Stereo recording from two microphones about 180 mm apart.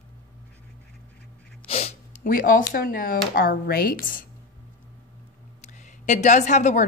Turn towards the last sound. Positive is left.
turn(degrees=45)  # may be behind; listen again after turning